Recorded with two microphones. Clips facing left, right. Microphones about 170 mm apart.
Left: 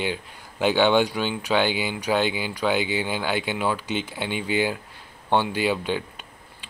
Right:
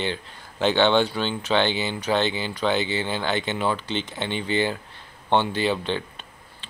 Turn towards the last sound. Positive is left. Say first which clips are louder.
# even
turn(degrees=10)  # may be behind; listen again after turning